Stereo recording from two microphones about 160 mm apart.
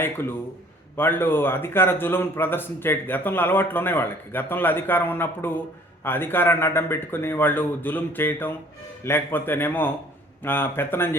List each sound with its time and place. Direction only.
0.0 s speech: 15° left (ahead or behind)